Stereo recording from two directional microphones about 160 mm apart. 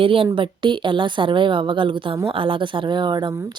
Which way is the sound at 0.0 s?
35° right (ahead or behind).